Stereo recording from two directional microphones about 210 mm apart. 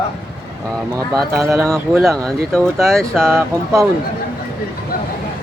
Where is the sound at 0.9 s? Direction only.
15° right (ahead or behind).